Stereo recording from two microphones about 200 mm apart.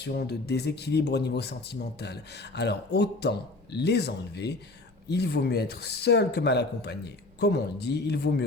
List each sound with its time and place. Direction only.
0.0 s speech: 55° left (ahead or behind)